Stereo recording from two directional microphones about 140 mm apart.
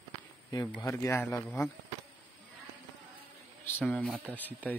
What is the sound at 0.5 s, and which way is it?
Speech, 25° left (ahead or behind).